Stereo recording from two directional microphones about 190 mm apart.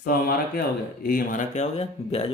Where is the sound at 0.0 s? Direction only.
50° left (ahead or behind).